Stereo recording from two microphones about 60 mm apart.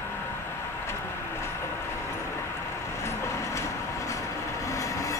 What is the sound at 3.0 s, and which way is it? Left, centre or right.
Vehicle, left.